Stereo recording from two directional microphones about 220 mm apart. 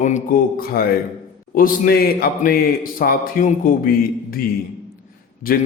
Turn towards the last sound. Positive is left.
turn(degrees=40)  # may be behind; listen again after turning